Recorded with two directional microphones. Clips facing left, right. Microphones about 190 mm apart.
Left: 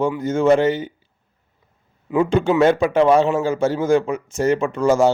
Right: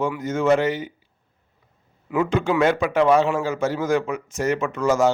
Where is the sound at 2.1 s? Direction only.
30° left (ahead or behind).